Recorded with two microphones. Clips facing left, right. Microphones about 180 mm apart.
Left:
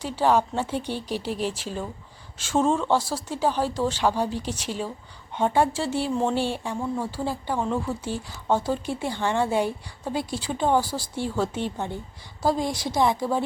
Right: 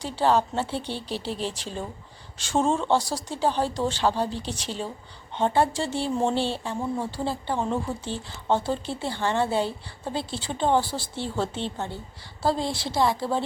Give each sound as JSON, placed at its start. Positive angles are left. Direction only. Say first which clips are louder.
{"t": 0.0, "sound": "speech", "louder": "left 1 dB", "side_deg": 10}